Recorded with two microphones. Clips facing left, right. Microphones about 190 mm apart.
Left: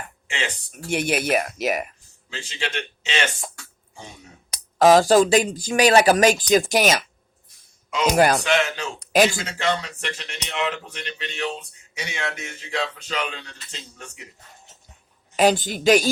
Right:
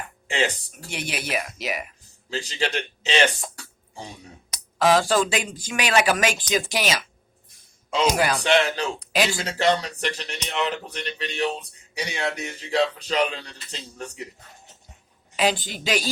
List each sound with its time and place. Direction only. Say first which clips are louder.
0.3 s speech: right 6 dB; 35° right (ahead or behind)
0.9 s speech: left 8 dB; 50° left (ahead or behind)
2.3 s speech: right 3 dB; 35° right (ahead or behind)
4.5 s speech: left 5 dB; 40° left (ahead or behind)
8.1 s speech: left 6 dB; 50° left (ahead or behind)
8.4 s speech: right 2 dB; 35° right (ahead or behind)
9.0 s speech: left 10 dB; 45° left (ahead or behind)
9.4 s speech: right 3 dB; 35° right (ahead or behind)
15.4 s speech: left 5 dB; 45° left (ahead or behind)